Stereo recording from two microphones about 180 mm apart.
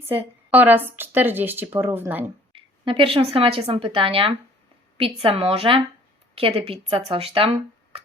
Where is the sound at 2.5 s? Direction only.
30° right (ahead or behind).